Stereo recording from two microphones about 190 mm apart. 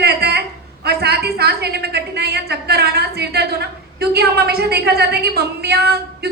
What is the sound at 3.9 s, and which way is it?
A woman's voice, 55° right (ahead or behind).